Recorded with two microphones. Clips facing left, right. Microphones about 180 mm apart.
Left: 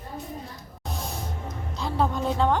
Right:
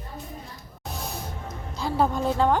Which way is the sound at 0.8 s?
Centre (ahead or behind).